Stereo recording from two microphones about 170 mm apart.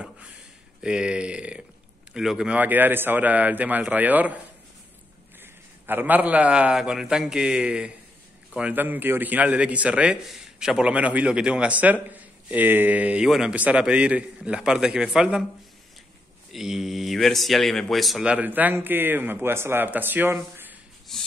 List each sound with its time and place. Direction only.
0.8 s a man's voice: 5° right (ahead or behind)
5.4 s a man's voice: 10° right (ahead or behind)
16.5 s a man's voice: centre (ahead or behind)
21.1 s speech: 5° left (ahead or behind)